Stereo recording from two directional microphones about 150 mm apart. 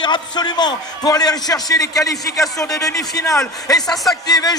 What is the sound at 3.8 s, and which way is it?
Speech, centre (ahead or behind).